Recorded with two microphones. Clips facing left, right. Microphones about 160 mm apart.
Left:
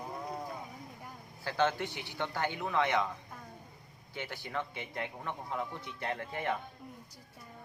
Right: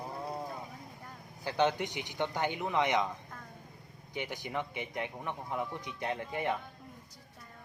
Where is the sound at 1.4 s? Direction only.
15° right (ahead or behind).